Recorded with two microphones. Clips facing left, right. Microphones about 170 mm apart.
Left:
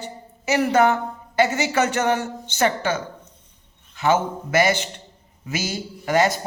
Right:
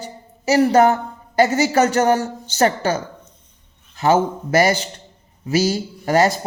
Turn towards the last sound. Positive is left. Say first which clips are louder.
# right 3 dB
turn(degrees=-40)  # may be behind; listen again after turning